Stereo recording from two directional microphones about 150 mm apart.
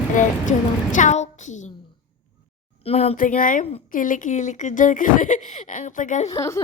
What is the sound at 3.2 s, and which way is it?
Speech, 65° left (ahead or behind).